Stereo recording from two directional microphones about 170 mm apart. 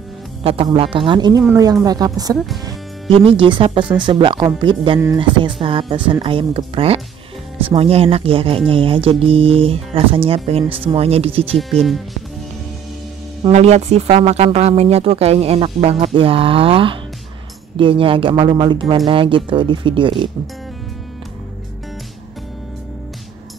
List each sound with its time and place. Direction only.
0.4 s speech: 35° right (ahead or behind)
2.6 s speech: 30° right (ahead or behind)
11.8 s speech: centre (ahead or behind)
13.5 s speech: 40° right (ahead or behind)